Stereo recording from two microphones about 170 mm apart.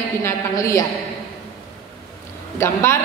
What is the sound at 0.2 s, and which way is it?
Speech, 20° left (ahead or behind).